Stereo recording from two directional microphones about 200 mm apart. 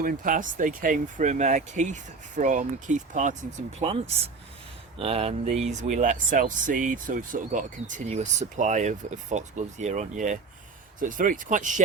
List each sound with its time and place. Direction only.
0.0 s speech: 45° right (ahead or behind)